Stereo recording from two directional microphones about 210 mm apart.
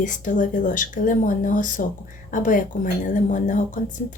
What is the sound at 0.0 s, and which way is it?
A woman's voice, 35° left (ahead or behind).